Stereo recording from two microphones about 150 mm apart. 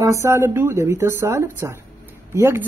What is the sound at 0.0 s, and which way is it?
Speech, 20° right (ahead or behind).